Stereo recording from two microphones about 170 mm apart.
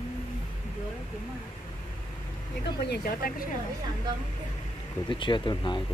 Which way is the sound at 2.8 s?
65° left (ahead or behind).